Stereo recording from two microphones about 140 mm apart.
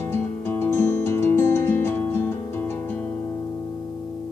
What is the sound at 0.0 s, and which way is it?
Music, 15° left (ahead or behind).